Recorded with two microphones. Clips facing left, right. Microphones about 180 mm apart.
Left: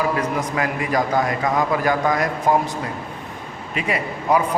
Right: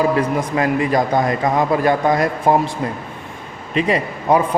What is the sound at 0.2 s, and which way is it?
A man's voice, 30° right (ahead or behind).